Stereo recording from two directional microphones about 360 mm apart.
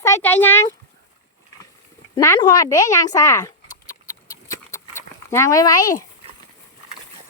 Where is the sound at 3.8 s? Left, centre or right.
Centre.